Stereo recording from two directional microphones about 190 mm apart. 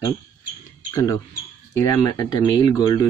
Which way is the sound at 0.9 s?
20° left (ahead or behind).